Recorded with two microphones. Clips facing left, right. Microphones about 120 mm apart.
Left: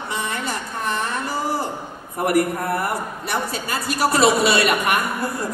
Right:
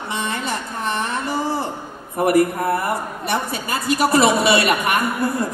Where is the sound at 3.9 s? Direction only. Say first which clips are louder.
Right 2 dB; 20° right (ahead or behind).